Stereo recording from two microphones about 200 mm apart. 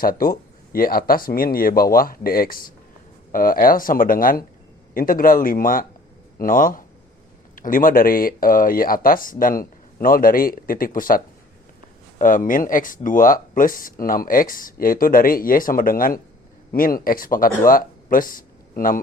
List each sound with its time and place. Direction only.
0.0 s speech: 45° left (ahead or behind)
12.2 s speech: 40° left (ahead or behind)